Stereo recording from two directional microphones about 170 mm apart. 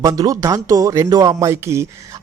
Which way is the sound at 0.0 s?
20° right (ahead or behind).